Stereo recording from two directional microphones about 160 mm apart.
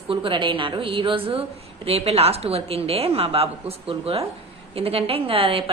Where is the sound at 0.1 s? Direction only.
30° right (ahead or behind).